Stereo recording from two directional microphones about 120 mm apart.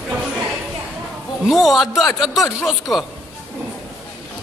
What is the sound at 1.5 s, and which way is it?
A man's voice, centre (ahead or behind).